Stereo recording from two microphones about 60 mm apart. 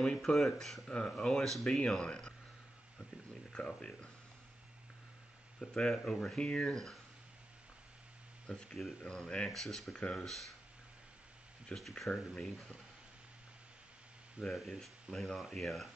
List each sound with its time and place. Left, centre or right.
0.0 s speech: centre
3.5 s speech: centre
5.6 s speech: centre
8.5 s speech: centre
11.7 s speech: centre
14.4 s speech: centre